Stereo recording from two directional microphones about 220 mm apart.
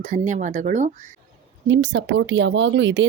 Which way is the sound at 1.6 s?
55° right (ahead or behind).